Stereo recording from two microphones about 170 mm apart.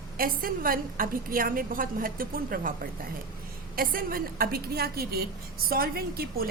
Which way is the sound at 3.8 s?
60° right (ahead or behind).